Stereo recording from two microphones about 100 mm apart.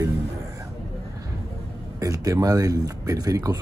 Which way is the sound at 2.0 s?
35° right (ahead or behind).